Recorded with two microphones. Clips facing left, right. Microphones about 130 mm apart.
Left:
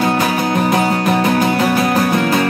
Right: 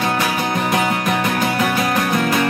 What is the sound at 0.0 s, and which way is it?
Music, 30° left (ahead or behind).